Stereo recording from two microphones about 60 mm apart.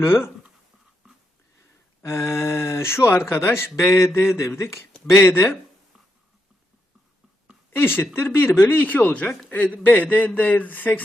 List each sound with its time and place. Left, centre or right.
0.0 s speech: left
1.0 s a sound: centre
2.0 s speech: left
5.2 s speech: left
7.8 s speech: left